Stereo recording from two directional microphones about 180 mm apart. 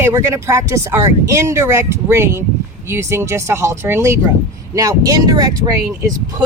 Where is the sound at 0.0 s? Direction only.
15° right (ahead or behind).